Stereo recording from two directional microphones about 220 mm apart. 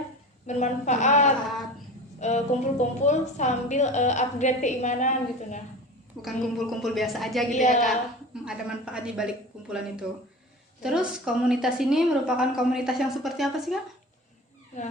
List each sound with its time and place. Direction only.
0.4 s a woman's voice: 30° left (ahead or behind)
6.2 s a woman's voice: centre (ahead or behind)
7.5 s a woman's voice: 35° left (ahead or behind)
8.4 s a woman's voice: 5° right (ahead or behind)